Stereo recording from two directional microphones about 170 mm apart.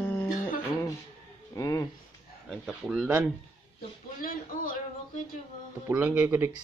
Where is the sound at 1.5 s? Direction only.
20° left (ahead or behind).